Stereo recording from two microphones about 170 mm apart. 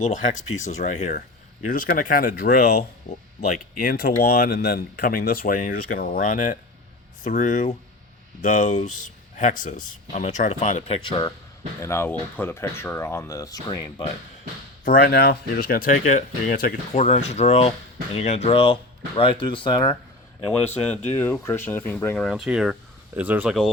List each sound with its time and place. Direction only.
0.0 s speech: 45° left (ahead or behind)
11.8 s speech: 15° left (ahead or behind)
14.8 s speech: 70° left (ahead or behind); by 19.9 s 30° left (ahead or behind)
20.7 s speech: 40° left (ahead or behind)
21.2 s speech: 15° left (ahead or behind)